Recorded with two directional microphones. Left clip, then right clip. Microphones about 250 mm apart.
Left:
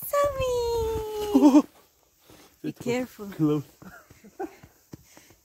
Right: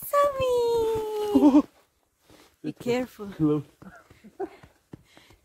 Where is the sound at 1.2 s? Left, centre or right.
Left.